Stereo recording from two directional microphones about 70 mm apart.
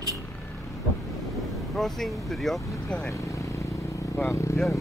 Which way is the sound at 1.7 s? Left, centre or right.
Centre.